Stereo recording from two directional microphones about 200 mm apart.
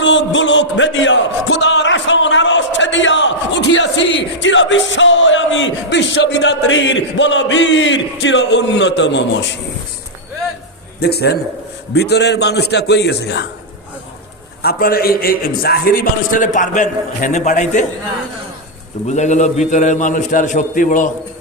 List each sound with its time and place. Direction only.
0.0 s a sound: 65° left (ahead or behind)
11.0 s a man's voice: 55° left (ahead or behind)
14.6 s a man's voice: 50° left (ahead or behind)
19.0 s a man's voice: 35° left (ahead or behind)